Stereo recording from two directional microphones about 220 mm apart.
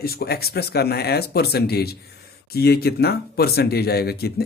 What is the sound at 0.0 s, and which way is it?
Speech, 45° left (ahead or behind).